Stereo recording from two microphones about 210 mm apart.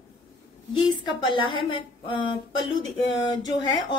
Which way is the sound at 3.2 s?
20° left (ahead or behind).